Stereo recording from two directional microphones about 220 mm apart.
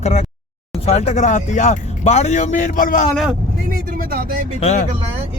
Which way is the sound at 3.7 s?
40° right (ahead or behind).